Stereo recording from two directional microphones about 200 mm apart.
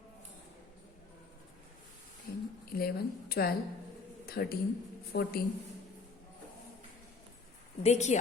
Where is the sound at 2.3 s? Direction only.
50° left (ahead or behind).